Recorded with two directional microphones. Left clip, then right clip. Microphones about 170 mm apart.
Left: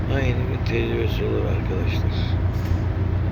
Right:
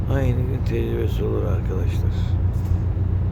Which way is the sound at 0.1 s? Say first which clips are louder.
Even; 25° right (ahead or behind).